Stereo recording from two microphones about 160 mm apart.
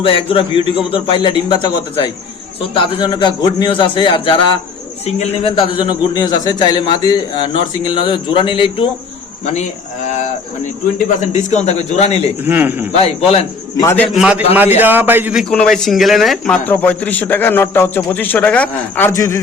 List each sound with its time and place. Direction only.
0.0 s a man's voice: 35° left (ahead or behind)
10.9 s a man's voice: 50° left (ahead or behind)
12.5 s a man's voice: 10° right (ahead or behind)
12.9 s a man's voice: 40° left (ahead or behind)
13.7 s a man's voice: 15° left (ahead or behind)
14.1 s a man's voice: 5° right (ahead or behind)
15.4 s speech: 5° left (ahead or behind)
16.6 s a man's voice: 10° left (ahead or behind)